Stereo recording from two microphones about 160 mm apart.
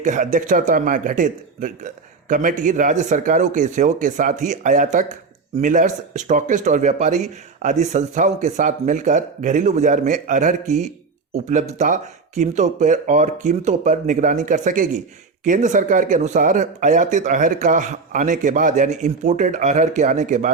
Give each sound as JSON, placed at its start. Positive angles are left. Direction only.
{"t": 0.0, "sound": "speech", "side_deg": -50}